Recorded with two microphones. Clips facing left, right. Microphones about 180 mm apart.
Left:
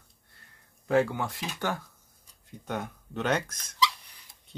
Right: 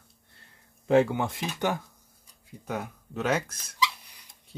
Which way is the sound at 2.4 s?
5° right (ahead or behind).